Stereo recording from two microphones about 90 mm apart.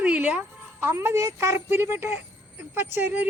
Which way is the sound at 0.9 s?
30° right (ahead or behind).